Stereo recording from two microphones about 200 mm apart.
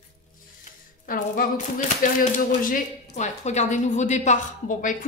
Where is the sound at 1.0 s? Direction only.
45° left (ahead or behind).